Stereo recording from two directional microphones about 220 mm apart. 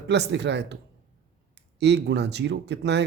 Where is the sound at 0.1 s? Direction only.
50° right (ahead or behind).